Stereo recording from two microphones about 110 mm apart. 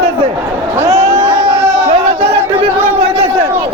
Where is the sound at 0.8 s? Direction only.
30° right (ahead or behind).